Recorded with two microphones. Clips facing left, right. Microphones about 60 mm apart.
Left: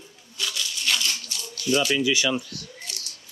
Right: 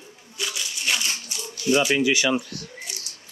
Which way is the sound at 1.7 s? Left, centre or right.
Right.